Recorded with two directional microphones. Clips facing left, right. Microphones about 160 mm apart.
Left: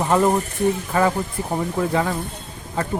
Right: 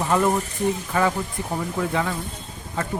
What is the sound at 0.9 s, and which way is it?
Speech, 40° left (ahead or behind).